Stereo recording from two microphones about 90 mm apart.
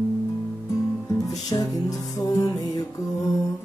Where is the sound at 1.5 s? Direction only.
45° left (ahead or behind).